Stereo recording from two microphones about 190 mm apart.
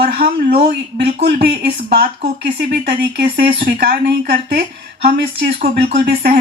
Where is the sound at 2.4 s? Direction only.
60° right (ahead or behind).